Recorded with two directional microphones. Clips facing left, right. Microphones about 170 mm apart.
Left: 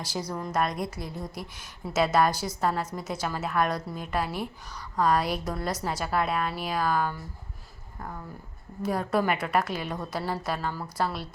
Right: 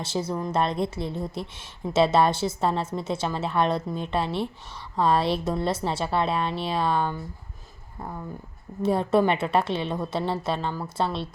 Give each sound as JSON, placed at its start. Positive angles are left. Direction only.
{"t": 0.0, "sound": "a woman's voice", "side_deg": -25}
{"t": 8.8, "sound": "a woman's voice", "side_deg": -25}